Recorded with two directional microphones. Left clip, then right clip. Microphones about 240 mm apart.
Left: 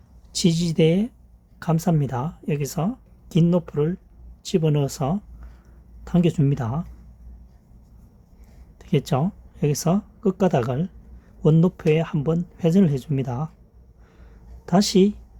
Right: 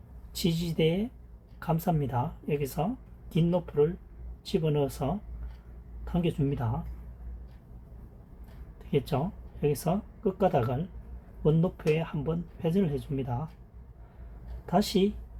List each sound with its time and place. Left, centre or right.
0.3 s speech: left
8.9 s speech: left
14.7 s speech: left